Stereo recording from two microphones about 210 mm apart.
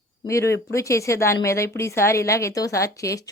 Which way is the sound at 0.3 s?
15° left (ahead or behind).